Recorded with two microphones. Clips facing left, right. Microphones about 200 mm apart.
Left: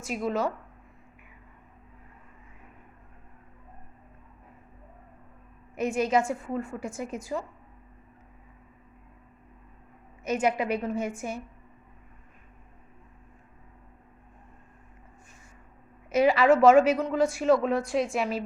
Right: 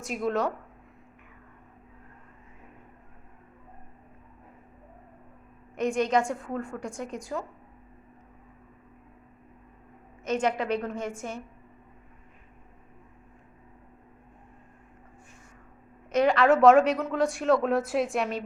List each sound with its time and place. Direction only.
0.0 s speech: centre (ahead or behind)
5.7 s speech: 5° left (ahead or behind)
10.2 s a woman's voice: 10° left (ahead or behind)
16.1 s speech: 5° left (ahead or behind)